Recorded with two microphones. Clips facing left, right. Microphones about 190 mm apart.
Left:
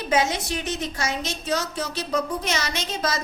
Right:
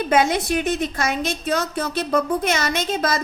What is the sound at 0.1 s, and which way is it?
A woman's voice, 55° right (ahead or behind).